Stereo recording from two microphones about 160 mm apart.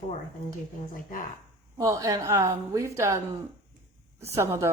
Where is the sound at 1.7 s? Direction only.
20° right (ahead or behind).